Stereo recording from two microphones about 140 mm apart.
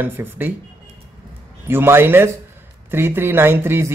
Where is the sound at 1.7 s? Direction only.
15° right (ahead or behind).